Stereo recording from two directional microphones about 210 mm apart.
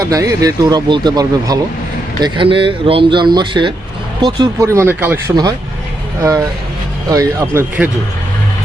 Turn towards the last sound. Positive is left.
turn(degrees=-10)  # may be behind; listen again after turning